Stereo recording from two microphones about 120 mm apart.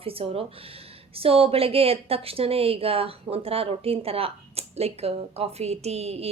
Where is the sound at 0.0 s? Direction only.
50° right (ahead or behind).